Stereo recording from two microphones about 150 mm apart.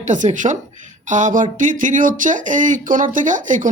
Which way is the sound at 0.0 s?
55° right (ahead or behind).